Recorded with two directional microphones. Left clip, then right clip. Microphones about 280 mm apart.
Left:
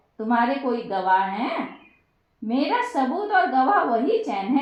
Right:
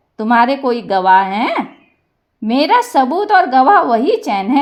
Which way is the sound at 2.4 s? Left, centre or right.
Right.